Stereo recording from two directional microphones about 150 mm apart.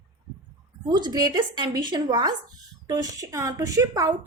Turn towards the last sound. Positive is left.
turn(degrees=-20)  # may be behind; listen again after turning